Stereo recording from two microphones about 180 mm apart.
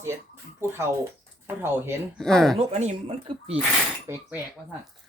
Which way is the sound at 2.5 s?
40° right (ahead or behind).